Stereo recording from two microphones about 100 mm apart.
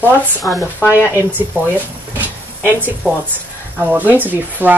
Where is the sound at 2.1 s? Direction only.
20° right (ahead or behind).